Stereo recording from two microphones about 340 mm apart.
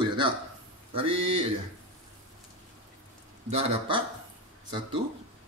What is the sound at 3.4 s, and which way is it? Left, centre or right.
Speech, centre.